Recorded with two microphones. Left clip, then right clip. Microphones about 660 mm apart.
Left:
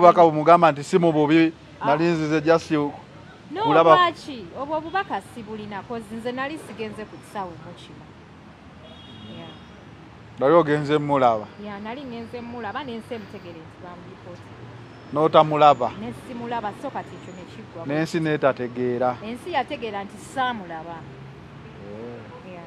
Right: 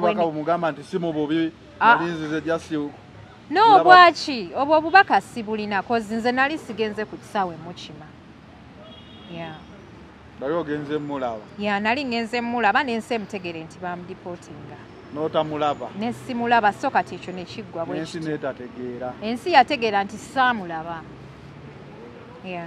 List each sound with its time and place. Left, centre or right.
0.0 s a man's voice: left
4.3 s a woman's voice: right
10.4 s a man's voice: left
11.6 s a woman's voice: right
15.1 s a man's voice: left
16.0 s a woman's voice: right
17.9 s a man's voice: left
19.2 s a woman's voice: right